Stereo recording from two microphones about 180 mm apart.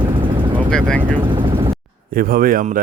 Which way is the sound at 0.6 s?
5° left (ahead or behind).